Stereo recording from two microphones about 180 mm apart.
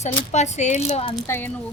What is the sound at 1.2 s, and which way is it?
Speech, 10° left (ahead or behind).